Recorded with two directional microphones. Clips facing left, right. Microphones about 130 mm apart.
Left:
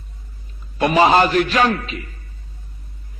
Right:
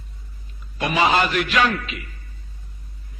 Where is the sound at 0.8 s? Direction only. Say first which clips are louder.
Left 6 dB; 40° left (ahead or behind).